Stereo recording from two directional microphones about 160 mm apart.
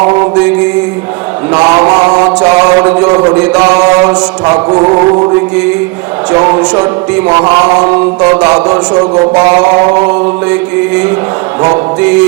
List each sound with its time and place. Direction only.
1.5 s mantra: 35° right (ahead or behind)
2.8 s a sound: 15° right (ahead or behind)
3.3 s chant: 10° right (ahead or behind)
4.0 s a man's voice: 25° right (ahead or behind)
6.4 s music: 25° right (ahead or behind)
8.4 s a man's voice: 25° right (ahead or behind)